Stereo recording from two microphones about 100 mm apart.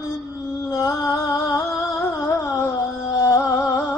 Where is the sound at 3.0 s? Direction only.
35° left (ahead or behind).